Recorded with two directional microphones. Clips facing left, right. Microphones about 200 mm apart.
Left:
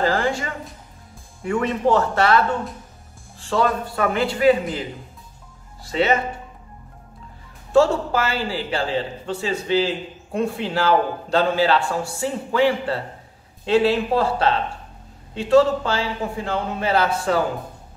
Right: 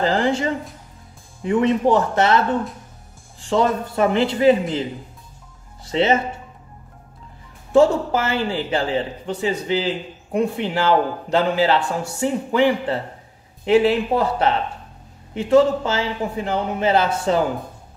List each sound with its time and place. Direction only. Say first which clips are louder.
0.0 s a man's voice: right 2 dB; 20° right (ahead or behind)
5.9 s a man's voice: right 2 dB; 25° right (ahead or behind)
7.7 s a man's voice: right 2 dB; 20° right (ahead or behind)